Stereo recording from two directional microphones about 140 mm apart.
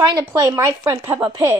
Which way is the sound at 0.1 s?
25° right (ahead or behind).